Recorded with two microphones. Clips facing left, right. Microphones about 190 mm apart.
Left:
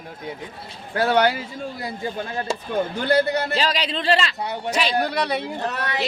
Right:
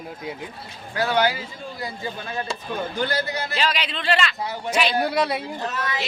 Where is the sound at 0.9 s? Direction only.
60° left (ahead or behind).